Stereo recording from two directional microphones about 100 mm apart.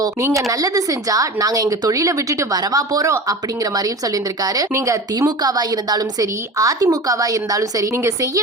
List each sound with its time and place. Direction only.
0.5 s a woman's voice: 35° right (ahead or behind)
5.4 s a woman's voice: 40° right (ahead or behind)